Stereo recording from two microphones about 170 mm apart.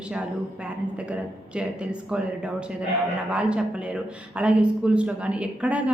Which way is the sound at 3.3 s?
5° right (ahead or behind).